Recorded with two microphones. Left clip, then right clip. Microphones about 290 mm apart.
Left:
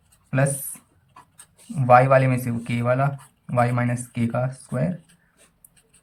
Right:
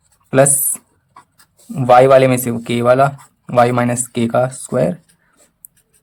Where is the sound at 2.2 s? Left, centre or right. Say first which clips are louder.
Right 12 dB; right.